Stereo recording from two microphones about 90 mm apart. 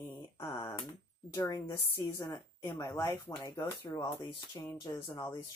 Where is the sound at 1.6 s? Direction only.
30° left (ahead or behind); by 4.7 s 45° left (ahead or behind).